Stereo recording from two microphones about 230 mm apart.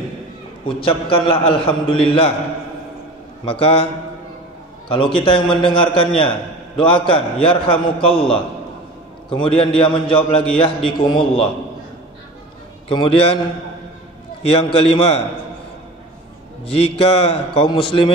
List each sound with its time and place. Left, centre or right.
0.7 s a man's voice: left
3.4 s a man's voice: left
4.8 s a man's voice: left
12.8 s a man's voice: left
14.4 s a man's voice: left
16.6 s a man's voice: left